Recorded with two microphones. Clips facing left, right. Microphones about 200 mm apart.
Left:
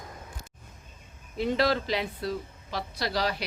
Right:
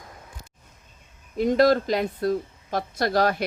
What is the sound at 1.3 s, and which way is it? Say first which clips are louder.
Speech: right 7 dB; 45° right (ahead or behind).